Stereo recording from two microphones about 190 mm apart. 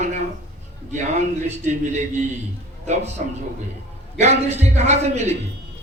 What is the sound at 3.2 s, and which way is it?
A man's voice, 40° right (ahead or behind).